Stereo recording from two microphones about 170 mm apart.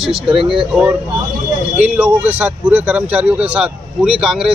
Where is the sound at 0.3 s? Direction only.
30° right (ahead or behind).